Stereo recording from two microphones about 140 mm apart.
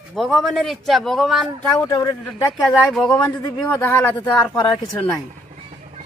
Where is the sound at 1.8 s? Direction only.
25° left (ahead or behind).